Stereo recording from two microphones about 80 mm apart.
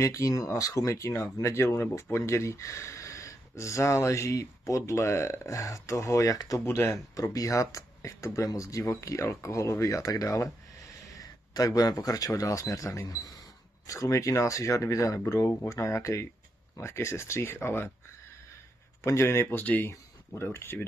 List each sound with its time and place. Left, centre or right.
0.0 s speech: left
6.6 s speech: left
19.0 s speech: left